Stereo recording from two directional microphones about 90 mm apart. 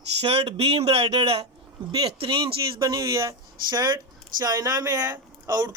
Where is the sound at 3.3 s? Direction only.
50° right (ahead or behind).